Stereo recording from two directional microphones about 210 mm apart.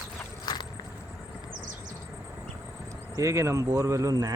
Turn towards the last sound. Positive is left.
turn(degrees=-15)  # may be behind; listen again after turning